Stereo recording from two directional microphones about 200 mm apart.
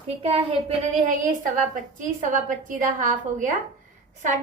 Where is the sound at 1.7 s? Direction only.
40° right (ahead or behind).